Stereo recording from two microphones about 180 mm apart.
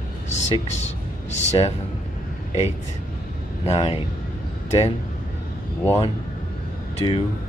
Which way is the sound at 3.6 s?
35° left (ahead or behind).